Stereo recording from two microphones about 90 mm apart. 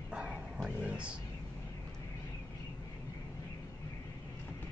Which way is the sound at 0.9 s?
10° right (ahead or behind).